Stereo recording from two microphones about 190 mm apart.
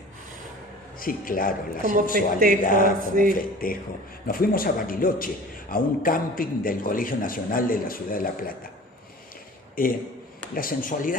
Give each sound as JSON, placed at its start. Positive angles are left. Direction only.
{"t": 0.9, "sound": "a man's voice", "side_deg": 45}
{"t": 1.8, "sound": "a man's voice", "side_deg": -45}
{"t": 2.6, "sound": "a man's voice", "side_deg": 45}
{"t": 9.8, "sound": "a man's voice", "side_deg": 50}